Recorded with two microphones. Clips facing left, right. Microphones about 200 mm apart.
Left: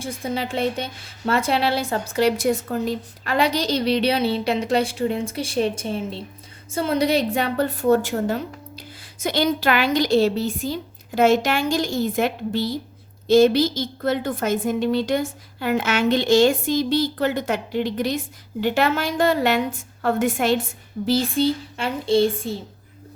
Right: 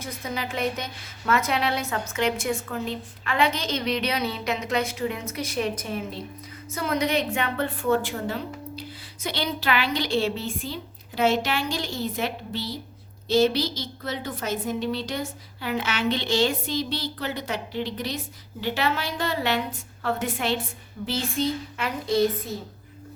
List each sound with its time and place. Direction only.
0.0 s a woman's voice: 30° left (ahead or behind); by 20.6 s 45° left (ahead or behind)
21.1 s speech: 35° left (ahead or behind)